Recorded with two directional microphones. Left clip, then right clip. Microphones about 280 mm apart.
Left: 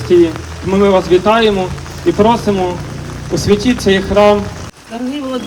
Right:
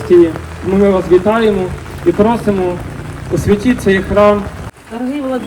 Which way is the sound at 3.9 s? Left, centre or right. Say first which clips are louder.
Even; left.